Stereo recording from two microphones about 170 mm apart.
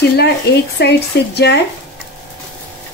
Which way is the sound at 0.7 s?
75° left (ahead or behind).